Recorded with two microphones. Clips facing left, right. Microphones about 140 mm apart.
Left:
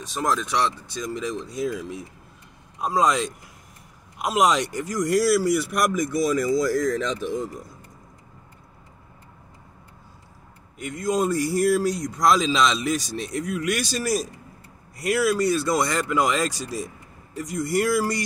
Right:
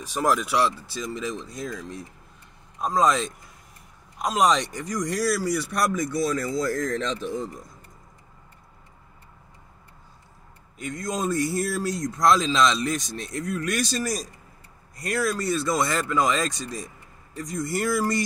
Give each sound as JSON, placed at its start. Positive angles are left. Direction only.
{"t": 0.0, "sound": "speech", "side_deg": -10}
{"t": 5.8, "sound": "speech", "side_deg": 20}
{"t": 10.8, "sound": "speech", "side_deg": 5}